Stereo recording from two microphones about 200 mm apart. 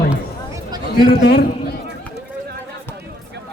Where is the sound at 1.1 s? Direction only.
50° left (ahead or behind).